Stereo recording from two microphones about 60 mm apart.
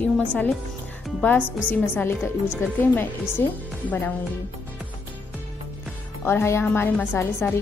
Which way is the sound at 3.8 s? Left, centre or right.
Left.